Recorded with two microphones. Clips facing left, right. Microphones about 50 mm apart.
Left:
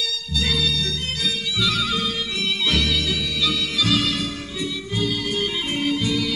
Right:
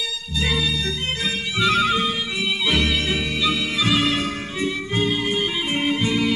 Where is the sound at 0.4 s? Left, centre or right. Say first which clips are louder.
Right 1 dB; right.